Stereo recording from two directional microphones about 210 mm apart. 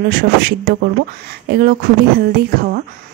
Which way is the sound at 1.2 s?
45° right (ahead or behind).